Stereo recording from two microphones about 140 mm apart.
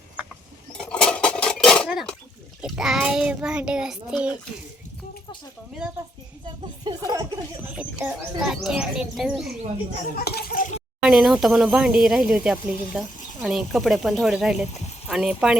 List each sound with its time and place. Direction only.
0.7 s dishes: 5° left (ahead or behind)
2.6 s speech: 5° right (ahead or behind)
6.4 s speech: 30° right (ahead or behind)
7.8 s speech: 10° right (ahead or behind)
10.2 s speech: 90° left
11.0 s speech: 5° right (ahead or behind)